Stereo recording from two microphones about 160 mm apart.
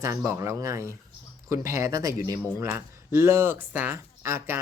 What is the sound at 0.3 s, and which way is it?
Speech, 20° right (ahead or behind).